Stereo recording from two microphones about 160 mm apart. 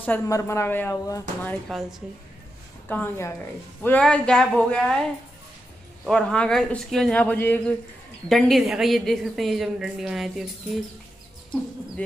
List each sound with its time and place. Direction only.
0.0 s speech: 15° left (ahead or behind)
1.7 s a woman's voice: centre (ahead or behind)
2.9 s a woman's voice: 15° left (ahead or behind)
6.0 s speech: 5° left (ahead or behind)
8.3 s a woman's voice: centre (ahead or behind)